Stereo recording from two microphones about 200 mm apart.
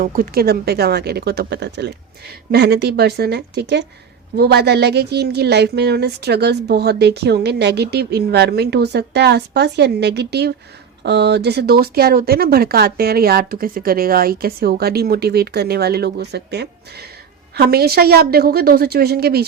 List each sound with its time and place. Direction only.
0.0 s a woman's voice: 50° right (ahead or behind)